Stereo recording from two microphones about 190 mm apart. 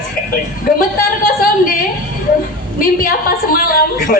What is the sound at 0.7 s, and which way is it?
Speech, 50° left (ahead or behind).